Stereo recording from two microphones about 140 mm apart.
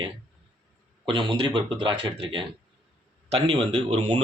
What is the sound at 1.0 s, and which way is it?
Speech, 35° right (ahead or behind).